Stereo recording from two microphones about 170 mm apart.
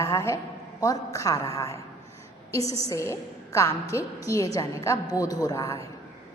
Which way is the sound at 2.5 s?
20° left (ahead or behind).